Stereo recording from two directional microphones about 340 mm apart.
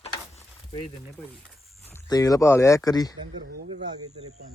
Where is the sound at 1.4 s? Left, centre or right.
Centre.